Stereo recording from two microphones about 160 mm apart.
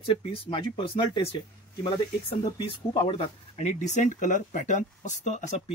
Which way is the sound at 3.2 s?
45° left (ahead or behind).